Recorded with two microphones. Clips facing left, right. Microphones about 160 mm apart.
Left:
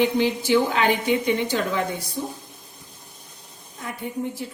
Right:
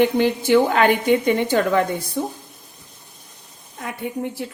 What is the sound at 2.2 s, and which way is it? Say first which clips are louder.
Speech: right 5 dB; 65° right (ahead or behind).